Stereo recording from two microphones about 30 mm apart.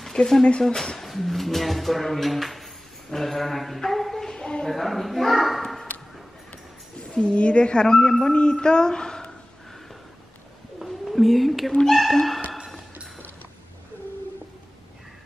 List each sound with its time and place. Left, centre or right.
0.0 s speech: centre
0.9 s speech: centre
3.1 s a sound: centre
4.3 s a sound: left
4.6 s speech: centre
7.2 s a woman's voice: left
7.9 s a sound: centre
8.3 s a woman's voice: left
10.8 s bird: centre
11.9 s speech: centre